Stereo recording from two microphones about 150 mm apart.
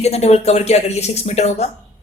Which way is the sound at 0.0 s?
45° left (ahead or behind).